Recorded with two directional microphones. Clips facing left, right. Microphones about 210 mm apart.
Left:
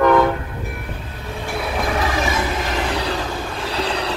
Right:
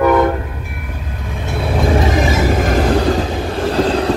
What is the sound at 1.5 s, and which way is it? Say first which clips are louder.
Vehicle: right 6 dB; 25° right (ahead or behind).